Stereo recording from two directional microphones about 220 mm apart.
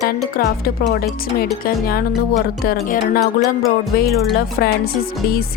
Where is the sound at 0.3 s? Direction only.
40° left (ahead or behind).